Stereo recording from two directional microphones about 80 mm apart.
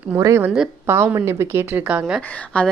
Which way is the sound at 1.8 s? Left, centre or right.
Centre.